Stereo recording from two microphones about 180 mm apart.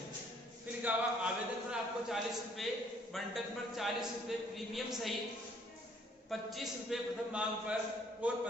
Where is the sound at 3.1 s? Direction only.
Centre (ahead or behind).